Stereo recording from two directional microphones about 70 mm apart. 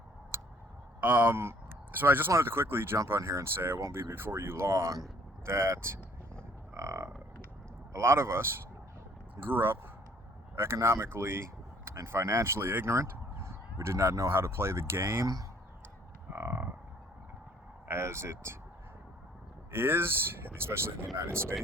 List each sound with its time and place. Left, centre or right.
0.3 s tick: right
1.0 s speech: right
1.4 s speech: right
3.2 s speech: right
6.7 s a sound: right
7.9 s speech: right
10.8 s speech: right
11.0 s speech: right
15.2 s speech: right
16.3 s moo: right
17.8 s speech: right
19.7 s speech: right